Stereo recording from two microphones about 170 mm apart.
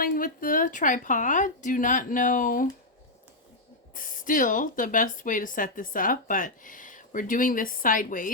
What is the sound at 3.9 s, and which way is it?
Speech, 55° left (ahead or behind).